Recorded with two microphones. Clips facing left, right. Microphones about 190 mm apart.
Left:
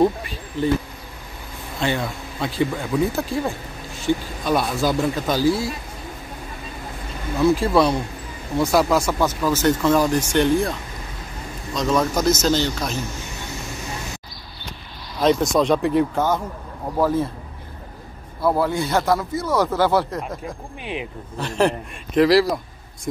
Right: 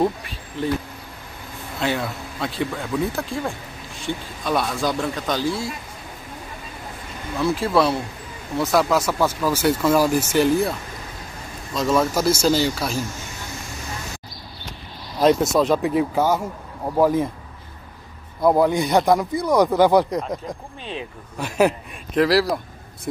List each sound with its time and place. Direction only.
0.0 s speech: centre (ahead or behind)
1.8 s speech: centre (ahead or behind)
7.3 s speech: centre (ahead or behind)
15.1 s speech: 5° right (ahead or behind)
18.4 s speech: 15° right (ahead or behind)
20.8 s speech: 15° left (ahead or behind)
21.4 s speech: 10° right (ahead or behind)